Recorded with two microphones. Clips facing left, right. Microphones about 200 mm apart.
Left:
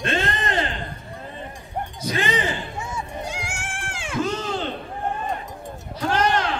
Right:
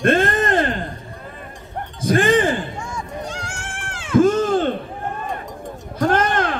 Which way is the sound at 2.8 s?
10° left (ahead or behind).